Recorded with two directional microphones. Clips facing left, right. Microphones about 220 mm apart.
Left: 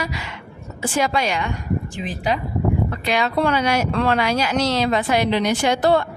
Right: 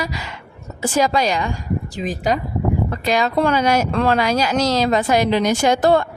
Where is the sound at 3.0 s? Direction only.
40° right (ahead or behind).